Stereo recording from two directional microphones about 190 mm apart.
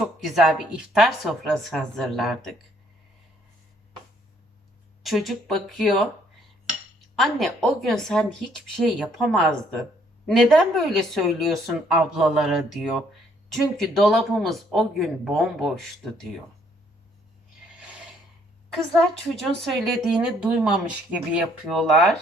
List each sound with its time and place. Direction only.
0.0 s speech: centre (ahead or behind)
5.0 s speech: centre (ahead or behind)
7.2 s speech: centre (ahead or behind)
19.6 s speech: centre (ahead or behind)